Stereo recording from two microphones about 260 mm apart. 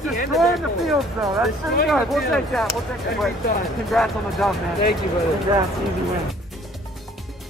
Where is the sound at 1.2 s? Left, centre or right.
Centre.